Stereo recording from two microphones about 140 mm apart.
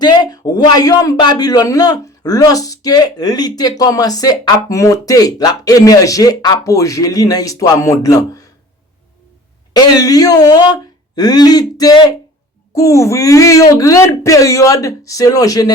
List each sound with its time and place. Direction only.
0.0 s speech: 30° left (ahead or behind)
9.7 s speech: 25° left (ahead or behind)